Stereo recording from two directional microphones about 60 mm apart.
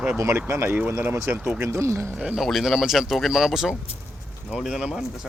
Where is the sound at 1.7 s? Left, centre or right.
Right.